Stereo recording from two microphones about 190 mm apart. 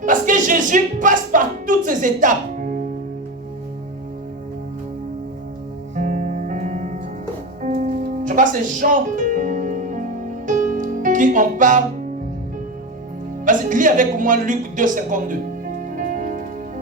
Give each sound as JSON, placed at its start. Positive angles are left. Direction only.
{"t": 0.0, "sound": "a sound", "side_deg": -45}
{"t": 6.0, "sound": "music", "side_deg": -45}
{"t": 13.4, "sound": "speech", "side_deg": -45}
{"t": 16.0, "sound": "music", "side_deg": -45}